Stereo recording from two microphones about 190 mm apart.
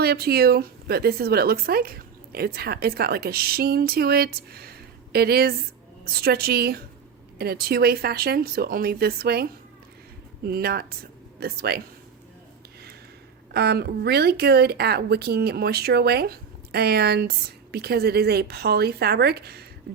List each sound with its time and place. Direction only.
0.0 s a woman's voice: 55° right (ahead or behind)
13.5 s speech: 55° right (ahead or behind)